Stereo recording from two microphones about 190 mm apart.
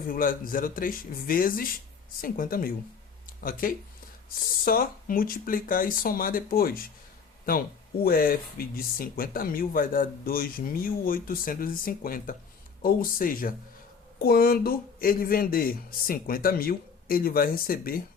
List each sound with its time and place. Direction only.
0.1 s speech: 45° left (ahead or behind)
8.0 s speech: 50° left (ahead or behind)